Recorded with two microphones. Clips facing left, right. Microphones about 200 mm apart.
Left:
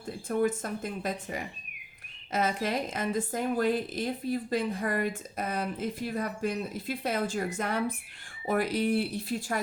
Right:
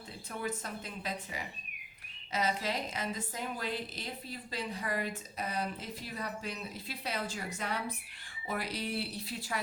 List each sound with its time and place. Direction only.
0.3 s a woman's voice: 50° left (ahead or behind)